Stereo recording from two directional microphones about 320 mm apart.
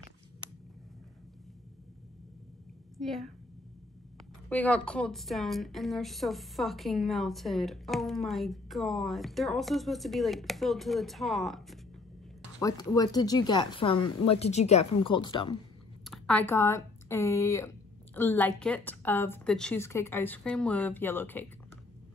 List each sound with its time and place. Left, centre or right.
3.0 s a woman's voice: centre
4.5 s a woman's voice: centre
12.5 s speech: centre
14.0 s a woman's voice: left
14.3 s speech: centre
16.0 s a woman's voice: centre